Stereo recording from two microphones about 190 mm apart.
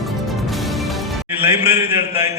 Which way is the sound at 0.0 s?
Centre (ahead or behind).